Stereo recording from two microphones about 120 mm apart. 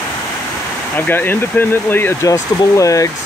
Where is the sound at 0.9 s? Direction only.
15° left (ahead or behind).